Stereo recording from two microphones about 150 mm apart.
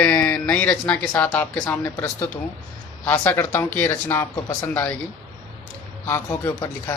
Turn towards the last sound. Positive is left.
turn(degrees=20)  # may be behind; listen again after turning